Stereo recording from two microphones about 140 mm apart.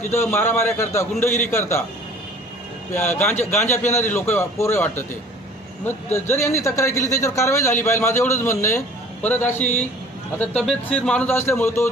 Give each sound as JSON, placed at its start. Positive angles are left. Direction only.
{"t": 0.1, "sound": "a man's voice", "side_deg": 20}
{"t": 2.9, "sound": "a man's voice", "side_deg": 15}
{"t": 6.1, "sound": "a man's voice", "side_deg": 15}